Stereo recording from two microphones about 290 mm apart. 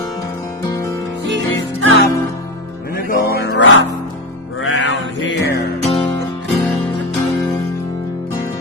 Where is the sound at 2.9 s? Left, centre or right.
Left.